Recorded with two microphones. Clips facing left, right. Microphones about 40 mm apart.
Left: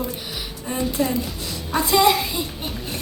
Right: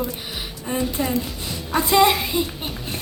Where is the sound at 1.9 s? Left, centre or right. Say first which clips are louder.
Right 1 dB; right.